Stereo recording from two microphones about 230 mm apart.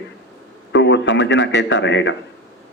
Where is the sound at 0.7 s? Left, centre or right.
Left.